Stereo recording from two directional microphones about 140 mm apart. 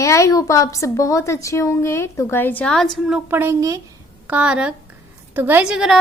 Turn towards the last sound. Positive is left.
turn(degrees=-5)  # may be behind; listen again after turning